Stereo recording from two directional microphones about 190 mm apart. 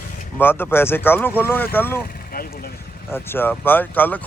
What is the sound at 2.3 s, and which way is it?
Vehicle, 50° left (ahead or behind).